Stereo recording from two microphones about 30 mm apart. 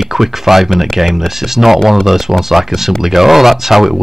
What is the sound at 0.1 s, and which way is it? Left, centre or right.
Speech, centre.